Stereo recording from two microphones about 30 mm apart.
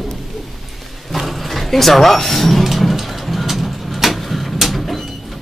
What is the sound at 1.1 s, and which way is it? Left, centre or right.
Speech, centre.